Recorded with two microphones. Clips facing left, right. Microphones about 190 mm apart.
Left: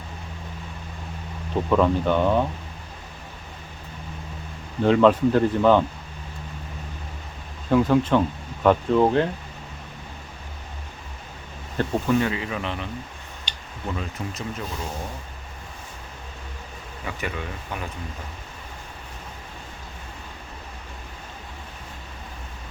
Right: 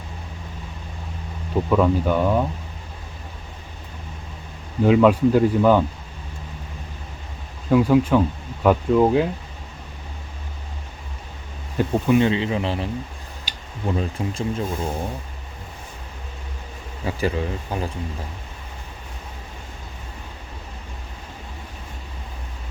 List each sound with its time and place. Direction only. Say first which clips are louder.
1.7 s speech: right 1 dB; 5° right (ahead or behind)
4.8 s speech: right 2 dB; 5° right (ahead or behind)
7.7 s speech: right 2 dB; 10° right (ahead or behind)
11.8 s speech: right 4 dB; 15° right (ahead or behind); by 12.9 s 30° right (ahead or behind)
13.5 s a sound: right 1 dB; 5° right (ahead or behind)
13.8 s speech: right 6 dB; 30° right (ahead or behind)
17.1 s speech: right 8 dB; 30° right (ahead or behind)